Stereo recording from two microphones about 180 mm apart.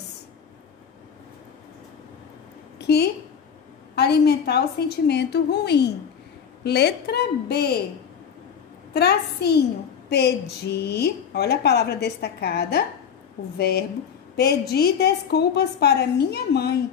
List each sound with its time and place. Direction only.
3.9 s a woman's voice: 65° left (ahead or behind)
8.9 s a woman's voice: 65° left (ahead or behind)